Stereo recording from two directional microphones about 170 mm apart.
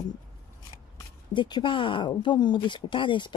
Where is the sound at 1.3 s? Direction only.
30° left (ahead or behind).